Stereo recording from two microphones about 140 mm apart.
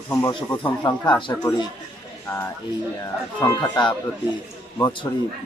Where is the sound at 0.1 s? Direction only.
25° left (ahead or behind).